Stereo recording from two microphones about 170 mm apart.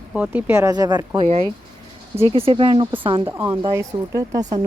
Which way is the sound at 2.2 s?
35° right (ahead or behind).